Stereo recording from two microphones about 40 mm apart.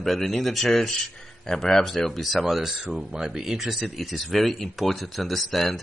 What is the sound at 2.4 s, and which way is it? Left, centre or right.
Speech, centre.